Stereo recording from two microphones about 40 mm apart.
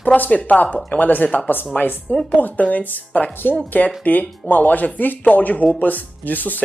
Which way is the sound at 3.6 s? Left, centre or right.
Left.